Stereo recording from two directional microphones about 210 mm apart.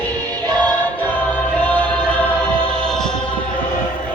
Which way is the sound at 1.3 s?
5° left (ahead or behind).